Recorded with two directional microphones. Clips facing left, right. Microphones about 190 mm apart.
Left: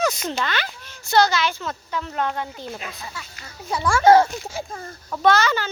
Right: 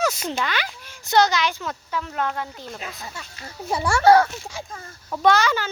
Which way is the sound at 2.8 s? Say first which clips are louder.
Even; 30° right (ahead or behind).